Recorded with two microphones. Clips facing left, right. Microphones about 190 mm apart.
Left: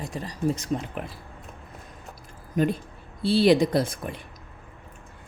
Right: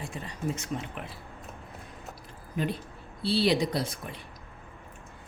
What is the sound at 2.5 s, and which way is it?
Speech, 45° left (ahead or behind).